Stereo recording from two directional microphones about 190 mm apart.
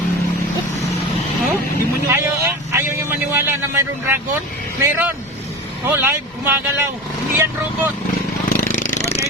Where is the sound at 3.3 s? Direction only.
10° right (ahead or behind).